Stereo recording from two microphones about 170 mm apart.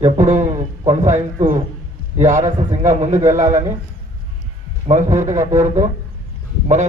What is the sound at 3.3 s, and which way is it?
Speech, 45° right (ahead or behind).